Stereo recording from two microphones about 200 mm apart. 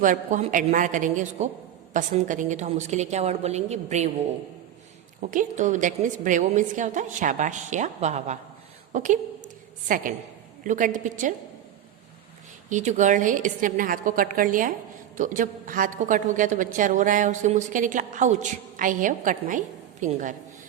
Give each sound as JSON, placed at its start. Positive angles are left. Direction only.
{"t": 0.0, "sound": "a woman's voice", "side_deg": -40}
{"t": 5.3, "sound": "a woman's voice", "side_deg": -40}
{"t": 12.6, "sound": "a woman's voice", "side_deg": -35}